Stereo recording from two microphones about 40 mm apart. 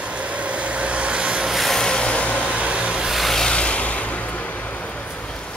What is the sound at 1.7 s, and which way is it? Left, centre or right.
Vehicle, centre.